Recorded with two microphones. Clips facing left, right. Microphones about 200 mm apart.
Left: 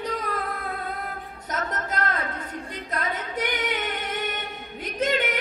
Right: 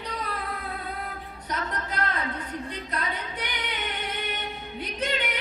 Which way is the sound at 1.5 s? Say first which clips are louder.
Left 2 dB; 45° left (ahead or behind).